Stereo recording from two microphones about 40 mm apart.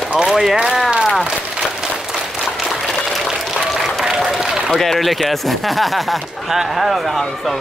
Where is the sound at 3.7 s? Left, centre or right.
Centre.